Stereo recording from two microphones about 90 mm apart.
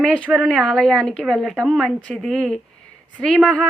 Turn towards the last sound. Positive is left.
turn(degrees=5)  # may be behind; listen again after turning